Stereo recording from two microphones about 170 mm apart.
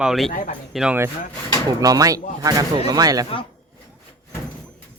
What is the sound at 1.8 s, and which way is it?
Speech, 20° right (ahead or behind).